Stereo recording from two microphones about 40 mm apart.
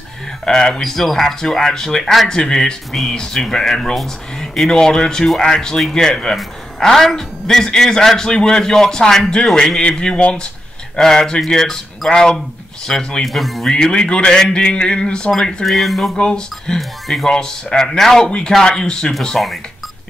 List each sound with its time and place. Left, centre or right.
0.5 s speech: centre
4.6 s speech: centre
9.8 s a sound: left
11.4 s speech: centre
12.8 s a sound: centre
13.2 s speech: centre
13.7 s a sound: centre
15.6 s speech: centre
16.3 s speech: centre
19.3 s speech: centre